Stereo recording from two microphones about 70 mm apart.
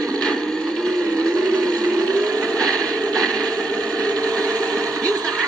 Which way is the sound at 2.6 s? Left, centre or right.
Centre.